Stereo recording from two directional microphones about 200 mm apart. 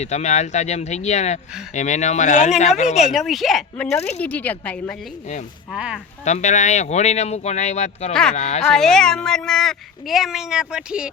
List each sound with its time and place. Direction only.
0.0 s speech: 35° left (ahead or behind)
3.1 s a woman's voice: centre (ahead or behind)
5.7 s speech: 5° right (ahead or behind)
6.2 s speech: 35° left (ahead or behind)
8.1 s speech: 5° left (ahead or behind)
8.4 s speech: 35° left (ahead or behind)
8.6 s speech: 5° left (ahead or behind)